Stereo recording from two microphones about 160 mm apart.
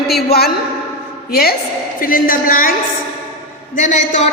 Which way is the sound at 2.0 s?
60° left (ahead or behind).